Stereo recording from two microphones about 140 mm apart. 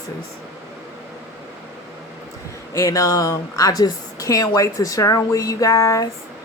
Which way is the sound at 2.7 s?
25° left (ahead or behind).